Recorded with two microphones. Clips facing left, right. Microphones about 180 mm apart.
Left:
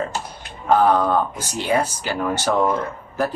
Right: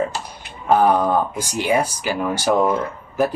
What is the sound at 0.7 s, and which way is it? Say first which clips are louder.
Speech: right 1 dB; 15° right (ahead or behind).